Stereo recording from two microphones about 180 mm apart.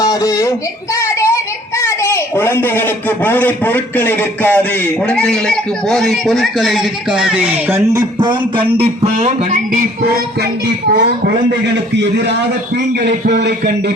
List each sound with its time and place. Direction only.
0.0 s a sound: 20° left (ahead or behind)
1.0 s child singing: 15° left (ahead or behind)
1.8 s a man's voice: 15° left (ahead or behind); by 7.8 s 5° right (ahead or behind)
7.9 s speech: 25° right (ahead or behind); by 9.8 s 40° right (ahead or behind)
13.1 s speech: 70° right (ahead or behind)